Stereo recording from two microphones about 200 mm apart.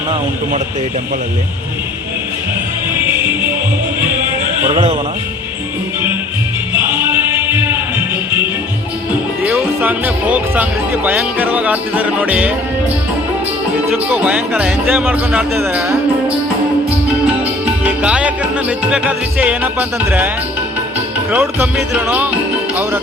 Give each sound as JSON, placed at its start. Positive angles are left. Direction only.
{"t": 7.1, "sound": "music", "side_deg": -10}
{"t": 9.4, "sound": "speech", "side_deg": -10}
{"t": 14.1, "sound": "speech", "side_deg": -5}
{"t": 17.4, "sound": "music", "side_deg": -5}
{"t": 21.2, "sound": "speech", "side_deg": -5}